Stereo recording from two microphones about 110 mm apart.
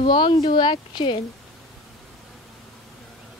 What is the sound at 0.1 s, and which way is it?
Speech, 50° left (ahead or behind).